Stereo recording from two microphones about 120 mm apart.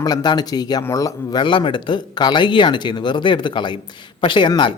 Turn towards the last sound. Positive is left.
turn(degrees=40)  # may be behind; listen again after turning